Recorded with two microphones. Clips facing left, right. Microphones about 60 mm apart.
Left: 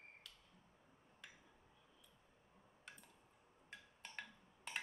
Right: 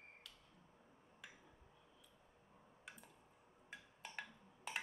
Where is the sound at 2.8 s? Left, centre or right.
Centre.